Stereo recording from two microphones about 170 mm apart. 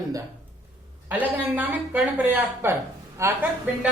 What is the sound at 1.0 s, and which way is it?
A woman's voice, 10° right (ahead or behind).